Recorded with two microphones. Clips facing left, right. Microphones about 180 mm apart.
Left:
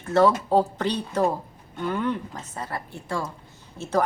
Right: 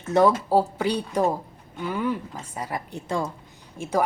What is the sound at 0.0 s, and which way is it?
A woman's voice, 15° right (ahead or behind).